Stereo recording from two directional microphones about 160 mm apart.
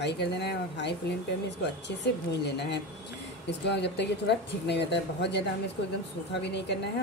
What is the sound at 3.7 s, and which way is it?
Speech, 90° left.